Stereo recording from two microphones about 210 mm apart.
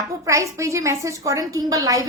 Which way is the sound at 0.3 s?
15° right (ahead or behind).